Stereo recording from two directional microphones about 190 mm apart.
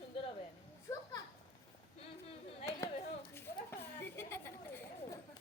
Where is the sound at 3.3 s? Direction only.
10° left (ahead or behind).